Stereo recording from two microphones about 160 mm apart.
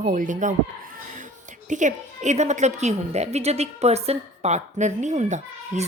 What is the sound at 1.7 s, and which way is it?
A woman's voice, 50° right (ahead or behind).